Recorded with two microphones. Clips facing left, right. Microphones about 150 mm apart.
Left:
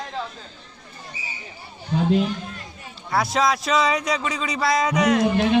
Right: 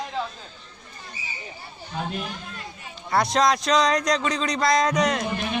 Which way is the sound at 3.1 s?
5° left (ahead or behind).